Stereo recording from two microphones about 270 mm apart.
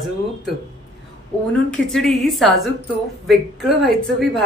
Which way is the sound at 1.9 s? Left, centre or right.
Centre.